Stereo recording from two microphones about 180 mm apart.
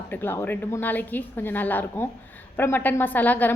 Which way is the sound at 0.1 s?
10° left (ahead or behind).